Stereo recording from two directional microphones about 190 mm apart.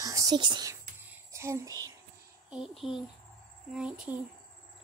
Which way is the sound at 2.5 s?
5° right (ahead or behind).